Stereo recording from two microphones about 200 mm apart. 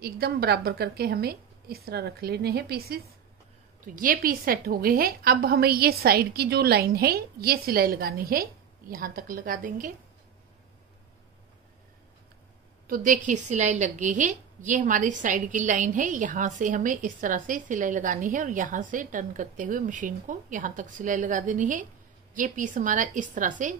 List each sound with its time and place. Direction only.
0.0 s a woman's voice: 50° right (ahead or behind)
12.8 s a woman's voice: 45° right (ahead or behind)